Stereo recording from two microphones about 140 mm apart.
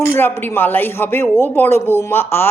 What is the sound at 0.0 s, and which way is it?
Speech, 15° left (ahead or behind).